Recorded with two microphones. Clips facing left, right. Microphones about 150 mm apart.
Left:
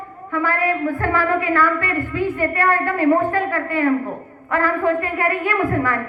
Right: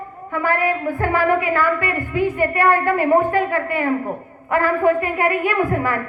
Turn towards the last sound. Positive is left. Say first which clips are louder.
# even
turn(degrees=-15)  # may be behind; listen again after turning